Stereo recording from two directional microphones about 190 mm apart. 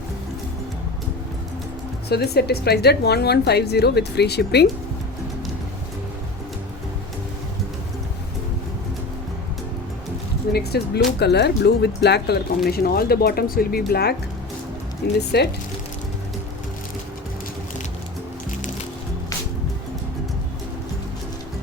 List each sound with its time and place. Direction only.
2.0 s speech: 60° left (ahead or behind)
10.5 s speech: 55° left (ahead or behind)